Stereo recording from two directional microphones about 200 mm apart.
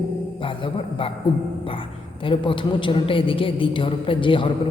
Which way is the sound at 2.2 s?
25° left (ahead or behind).